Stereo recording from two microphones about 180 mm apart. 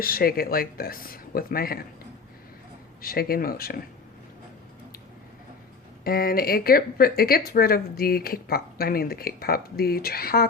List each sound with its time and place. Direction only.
0.0 s speech: 55° left (ahead or behind)
3.0 s speech: 55° left (ahead or behind)
6.1 s speech: 55° left (ahead or behind)